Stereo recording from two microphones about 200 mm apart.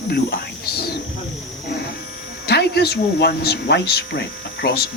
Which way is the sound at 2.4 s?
55° left (ahead or behind).